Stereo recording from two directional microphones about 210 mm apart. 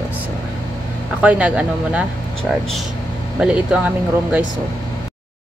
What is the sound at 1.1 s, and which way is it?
Speech, 5° right (ahead or behind).